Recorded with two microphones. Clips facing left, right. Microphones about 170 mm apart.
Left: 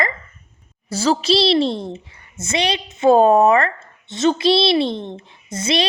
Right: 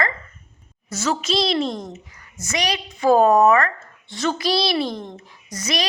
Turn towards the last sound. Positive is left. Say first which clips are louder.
# left 5 dB
turn(degrees=25)  # may be behind; listen again after turning